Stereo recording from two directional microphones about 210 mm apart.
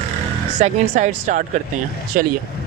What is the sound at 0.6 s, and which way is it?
Speech, 35° right (ahead or behind).